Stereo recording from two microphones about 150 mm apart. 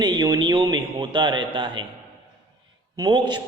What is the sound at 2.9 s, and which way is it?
Speech, 30° right (ahead or behind).